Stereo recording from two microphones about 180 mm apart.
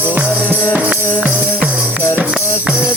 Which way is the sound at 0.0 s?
10° right (ahead or behind).